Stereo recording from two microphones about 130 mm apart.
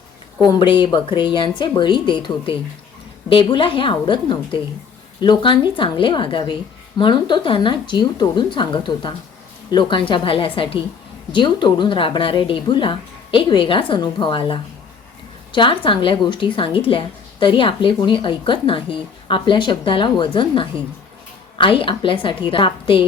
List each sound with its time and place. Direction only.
0.4 s speech: 35° left (ahead or behind)